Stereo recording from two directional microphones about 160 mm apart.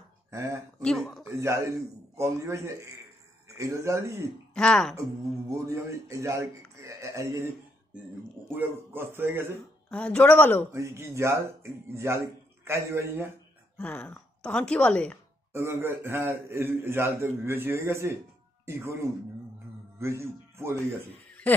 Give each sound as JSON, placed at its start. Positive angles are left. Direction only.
{"t": 0.3, "sound": "speech", "side_deg": -20}
{"t": 0.8, "sound": "speech", "side_deg": 5}
{"t": 1.4, "sound": "a man's voice", "side_deg": -20}
{"t": 4.6, "sound": "speech", "side_deg": 5}
{"t": 5.5, "sound": "speech", "side_deg": -20}
{"t": 8.5, "sound": "a man's voice", "side_deg": -15}
{"t": 9.8, "sound": "speech", "side_deg": 10}
{"t": 10.7, "sound": "a man's voice", "side_deg": -15}
{"t": 13.7, "sound": "a woman's voice", "side_deg": 10}
{"t": 15.5, "sound": "a man's voice", "side_deg": -15}
{"t": 21.5, "sound": "speech", "side_deg": 10}